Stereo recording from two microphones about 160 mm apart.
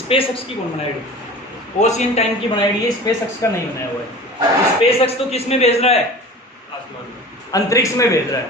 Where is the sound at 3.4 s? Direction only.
20° left (ahead or behind).